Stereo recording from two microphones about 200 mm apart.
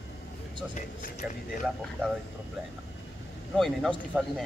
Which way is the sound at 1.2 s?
5° right (ahead or behind).